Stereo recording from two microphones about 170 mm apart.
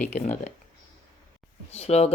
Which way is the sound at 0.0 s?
45° left (ahead or behind).